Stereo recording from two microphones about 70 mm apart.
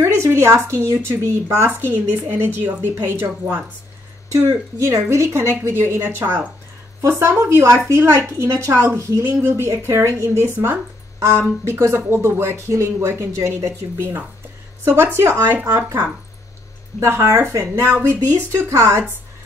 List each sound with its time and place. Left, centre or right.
0.0 s a woman's voice: right
1.8 s speech: right
4.5 s speech: right
7.0 s speech: right
17.0 s speech: right